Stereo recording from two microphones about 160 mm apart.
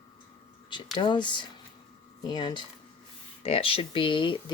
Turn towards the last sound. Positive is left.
turn(degrees=30)  # may be behind; listen again after turning